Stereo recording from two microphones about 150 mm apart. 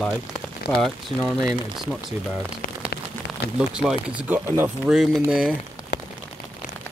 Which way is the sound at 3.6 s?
5° right (ahead or behind).